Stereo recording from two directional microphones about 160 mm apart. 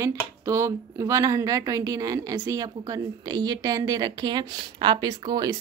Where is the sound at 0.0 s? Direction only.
15° right (ahead or behind).